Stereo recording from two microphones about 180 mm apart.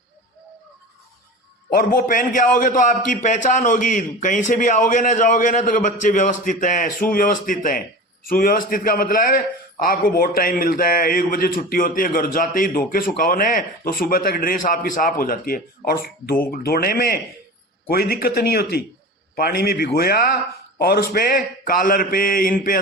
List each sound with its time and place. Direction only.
1.7 s a man's voice: 55° left (ahead or behind)